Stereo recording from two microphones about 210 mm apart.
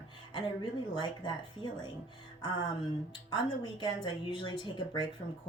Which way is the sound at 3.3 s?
25° left (ahead or behind).